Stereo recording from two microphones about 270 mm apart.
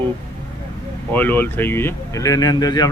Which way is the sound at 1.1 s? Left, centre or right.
Centre.